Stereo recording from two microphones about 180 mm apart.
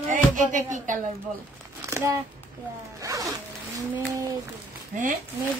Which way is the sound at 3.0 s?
20° right (ahead or behind).